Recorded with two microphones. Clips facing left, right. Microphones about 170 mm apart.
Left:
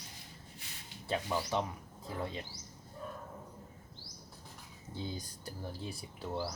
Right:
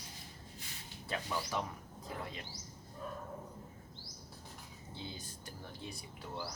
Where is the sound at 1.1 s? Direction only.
25° left (ahead or behind).